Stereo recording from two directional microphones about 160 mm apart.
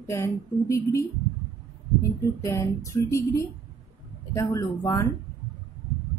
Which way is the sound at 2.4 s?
20° left (ahead or behind).